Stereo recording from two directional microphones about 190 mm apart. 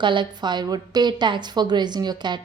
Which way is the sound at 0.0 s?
25° right (ahead or behind).